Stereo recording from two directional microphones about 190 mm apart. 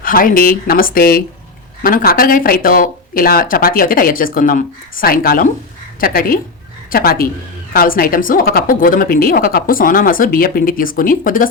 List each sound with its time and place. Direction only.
0.0 s a woman's voice: 45° left (ahead or behind)